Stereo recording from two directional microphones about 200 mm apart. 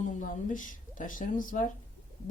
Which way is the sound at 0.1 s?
40° left (ahead or behind).